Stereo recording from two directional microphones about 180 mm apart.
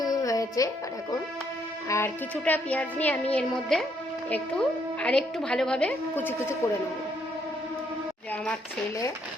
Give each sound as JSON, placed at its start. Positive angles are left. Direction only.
{"t": 0.0, "sound": "music", "side_deg": 20}
{"t": 1.9, "sound": "speech", "side_deg": 10}
{"t": 5.0, "sound": "a woman's voice", "side_deg": 5}